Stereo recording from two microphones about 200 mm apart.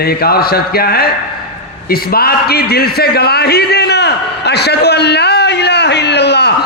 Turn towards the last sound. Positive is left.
turn(degrees=55)  # may be behind; listen again after turning